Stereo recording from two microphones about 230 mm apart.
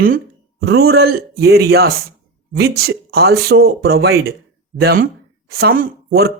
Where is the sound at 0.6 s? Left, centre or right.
Right.